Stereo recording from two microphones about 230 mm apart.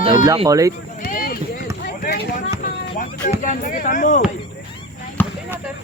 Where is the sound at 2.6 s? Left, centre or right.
Left.